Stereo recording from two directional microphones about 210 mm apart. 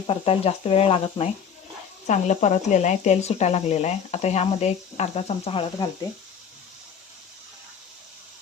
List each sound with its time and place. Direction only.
0.1 s speech: 30° left (ahead or behind)